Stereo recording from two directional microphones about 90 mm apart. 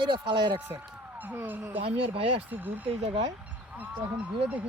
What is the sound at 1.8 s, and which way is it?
Speech, 90° right.